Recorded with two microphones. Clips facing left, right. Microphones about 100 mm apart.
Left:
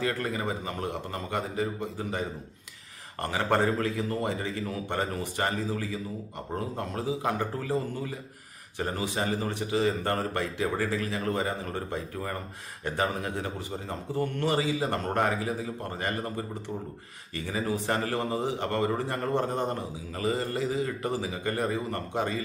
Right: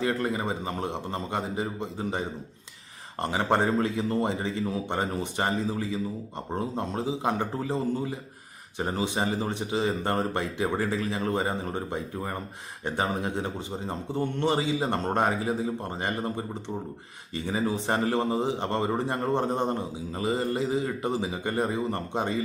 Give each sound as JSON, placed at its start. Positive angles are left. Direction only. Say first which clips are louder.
{"t": 0.0, "sound": "speech", "louder": "right 2 dB", "side_deg": -25}